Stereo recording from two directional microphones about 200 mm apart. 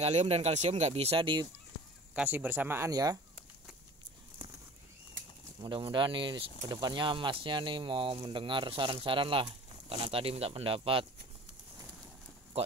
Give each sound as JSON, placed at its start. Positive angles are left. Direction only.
{"t": 0.0, "sound": "speech", "side_deg": -30}
{"t": 2.1, "sound": "speech", "side_deg": -10}
{"t": 5.6, "sound": "speech", "side_deg": -25}